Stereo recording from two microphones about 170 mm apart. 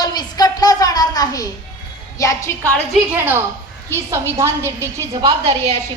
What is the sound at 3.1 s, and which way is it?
A woman's voice, 15° right (ahead or behind).